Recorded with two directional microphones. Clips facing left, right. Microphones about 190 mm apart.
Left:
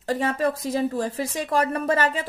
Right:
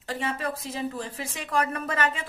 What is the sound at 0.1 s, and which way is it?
Speech, 40° left (ahead or behind).